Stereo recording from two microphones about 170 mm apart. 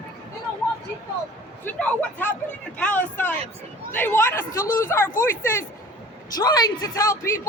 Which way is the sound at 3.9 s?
10° left (ahead or behind).